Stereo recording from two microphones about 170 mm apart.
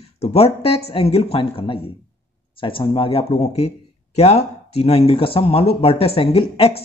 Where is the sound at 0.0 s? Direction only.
35° left (ahead or behind).